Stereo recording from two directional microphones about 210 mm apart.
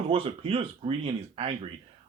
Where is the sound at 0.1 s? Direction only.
25° right (ahead or behind).